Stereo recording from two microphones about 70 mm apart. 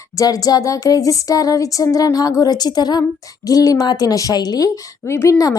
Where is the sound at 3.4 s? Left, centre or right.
Left.